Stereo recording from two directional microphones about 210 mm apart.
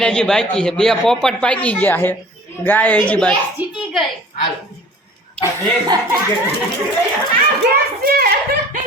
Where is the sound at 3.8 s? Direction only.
Centre (ahead or behind).